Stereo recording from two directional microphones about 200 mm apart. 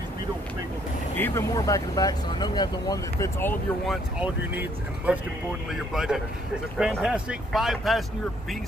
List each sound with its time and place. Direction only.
1.1 s speech: 10° left (ahead or behind)
3.8 s speech: centre (ahead or behind)